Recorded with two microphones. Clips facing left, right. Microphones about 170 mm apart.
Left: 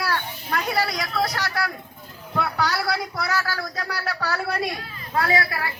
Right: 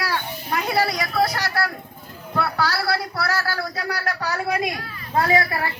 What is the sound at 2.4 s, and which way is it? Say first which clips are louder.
Speech: right 1 dB; 5° right (ahead or behind).